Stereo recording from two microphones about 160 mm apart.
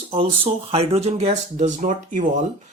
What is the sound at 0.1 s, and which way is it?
Speech, 35° right (ahead or behind).